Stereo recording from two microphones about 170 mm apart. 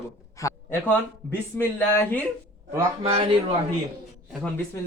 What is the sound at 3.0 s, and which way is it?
Speech, 35° right (ahead or behind).